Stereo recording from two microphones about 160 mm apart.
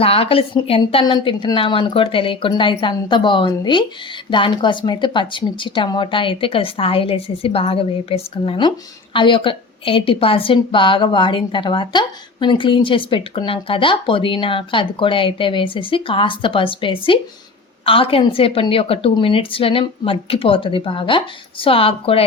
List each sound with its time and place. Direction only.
0.0 s a woman's voice: 35° left (ahead or behind)